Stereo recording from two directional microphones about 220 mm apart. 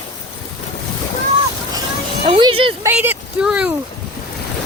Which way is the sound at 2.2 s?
25° right (ahead or behind).